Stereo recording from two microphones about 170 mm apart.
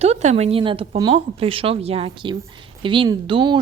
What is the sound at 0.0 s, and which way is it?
A woman's voice, 40° right (ahead or behind).